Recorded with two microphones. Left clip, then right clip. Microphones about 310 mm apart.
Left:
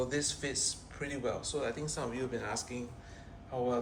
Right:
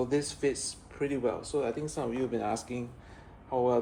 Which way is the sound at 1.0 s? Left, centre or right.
Right.